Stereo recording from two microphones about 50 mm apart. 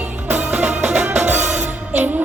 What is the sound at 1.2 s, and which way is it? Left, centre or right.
Music, right.